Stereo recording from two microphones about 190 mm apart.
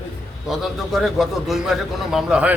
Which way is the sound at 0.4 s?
Centre (ahead or behind).